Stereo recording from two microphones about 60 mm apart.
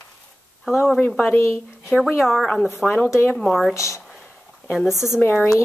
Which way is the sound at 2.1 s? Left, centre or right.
Centre.